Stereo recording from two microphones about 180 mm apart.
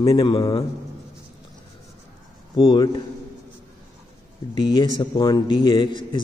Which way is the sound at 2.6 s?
25° left (ahead or behind).